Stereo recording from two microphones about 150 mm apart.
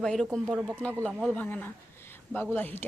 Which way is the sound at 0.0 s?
5° left (ahead or behind).